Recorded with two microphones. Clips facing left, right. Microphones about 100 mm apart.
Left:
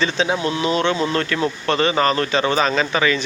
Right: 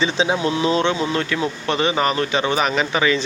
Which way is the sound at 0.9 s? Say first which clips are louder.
Left 1 dB; 15° right (ahead or behind).